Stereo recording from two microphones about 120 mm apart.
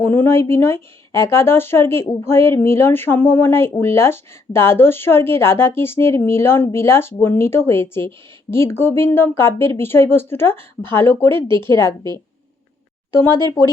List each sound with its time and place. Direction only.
0.0 s a woman's voice: 20° left (ahead or behind)
11.9 s speech: 35° right (ahead or behind)